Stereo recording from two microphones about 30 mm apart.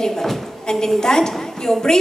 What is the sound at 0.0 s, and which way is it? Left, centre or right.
A woman's voice, centre.